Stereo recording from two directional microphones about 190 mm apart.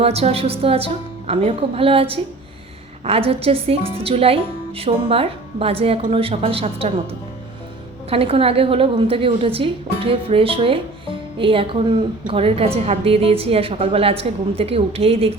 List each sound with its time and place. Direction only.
0.0 s a woman's voice: 30° right (ahead or behind)
8.1 s a woman's voice: 30° right (ahead or behind)